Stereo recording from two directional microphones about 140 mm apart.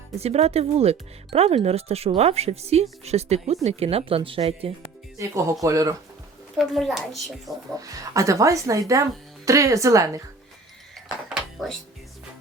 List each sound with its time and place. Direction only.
0.2 s speech: 45° right (ahead or behind)
5.1 s speech: 20° right (ahead or behind)
6.6 s a child's voice: centre (ahead or behind)
7.8 s speech: 25° right (ahead or behind)
11.3 s dishes: centre (ahead or behind)